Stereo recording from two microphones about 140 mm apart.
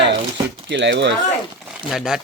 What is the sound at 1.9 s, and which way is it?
Speech, centre (ahead or behind).